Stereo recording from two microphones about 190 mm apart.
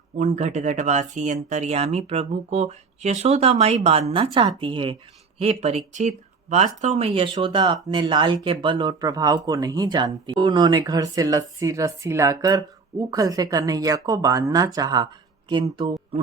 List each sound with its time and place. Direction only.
0.2 s speech: 40° right (ahead or behind)
7.1 s speech: 25° right (ahead or behind)